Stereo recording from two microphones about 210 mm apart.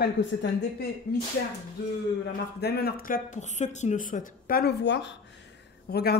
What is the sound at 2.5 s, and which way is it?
Speech, 50° left (ahead or behind).